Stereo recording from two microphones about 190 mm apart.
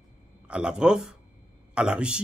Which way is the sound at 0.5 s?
5° right (ahead or behind).